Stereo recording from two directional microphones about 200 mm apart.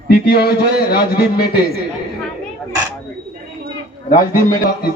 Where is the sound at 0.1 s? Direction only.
55° left (ahead or behind).